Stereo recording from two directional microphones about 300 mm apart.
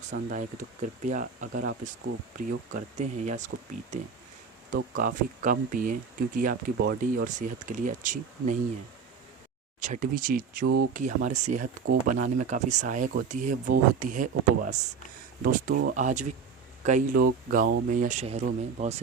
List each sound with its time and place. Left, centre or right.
0.1 s speech: right
4.7 s speech: right
9.8 s speech: right